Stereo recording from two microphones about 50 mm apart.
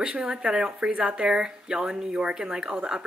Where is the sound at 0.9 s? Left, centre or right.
Right.